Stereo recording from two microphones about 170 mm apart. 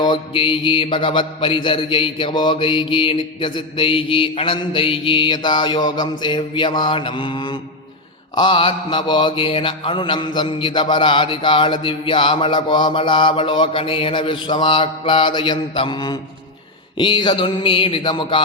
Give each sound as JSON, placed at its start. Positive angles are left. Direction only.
{"t": 0.0, "sound": "mantra", "side_deg": 30}